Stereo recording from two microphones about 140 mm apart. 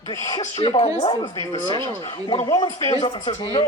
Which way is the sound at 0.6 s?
40° left (ahead or behind).